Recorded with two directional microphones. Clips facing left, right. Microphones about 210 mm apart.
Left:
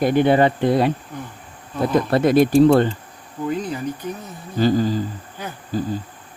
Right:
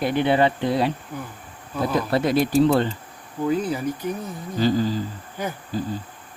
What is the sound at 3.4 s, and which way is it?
Speech, 5° right (ahead or behind).